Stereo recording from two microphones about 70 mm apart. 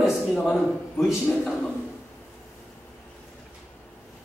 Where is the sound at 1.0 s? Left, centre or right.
Centre.